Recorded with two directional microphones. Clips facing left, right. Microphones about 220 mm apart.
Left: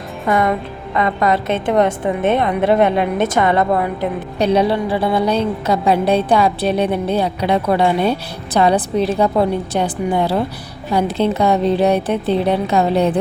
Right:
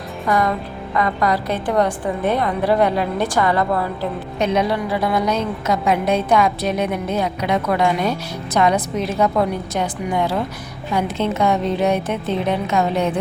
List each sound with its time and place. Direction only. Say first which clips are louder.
0.3 s a woman's voice: left 3 dB; 25° left (ahead or behind)
4.4 s a woman's voice: left 4 dB; 35° left (ahead or behind)